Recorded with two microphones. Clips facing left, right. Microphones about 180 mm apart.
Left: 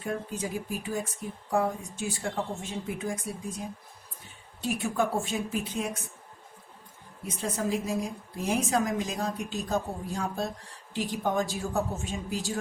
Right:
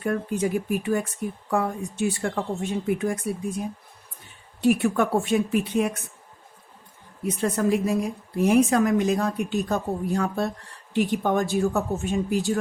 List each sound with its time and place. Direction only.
0.0 s speech: 60° right (ahead or behind)
4.6 s speech: 65° right (ahead or behind)
7.3 s speech: 65° right (ahead or behind)